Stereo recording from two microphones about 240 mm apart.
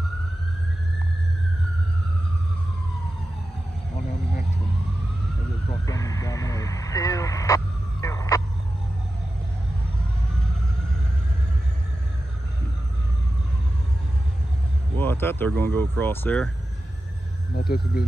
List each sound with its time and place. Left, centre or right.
5.7 s vehicle: centre
15.0 s speech: centre
17.6 s speech: left